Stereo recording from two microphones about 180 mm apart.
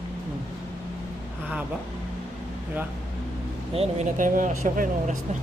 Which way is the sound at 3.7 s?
35° right (ahead or behind).